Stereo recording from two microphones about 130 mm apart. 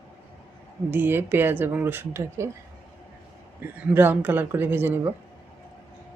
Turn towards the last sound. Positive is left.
turn(degrees=-15)  # may be behind; listen again after turning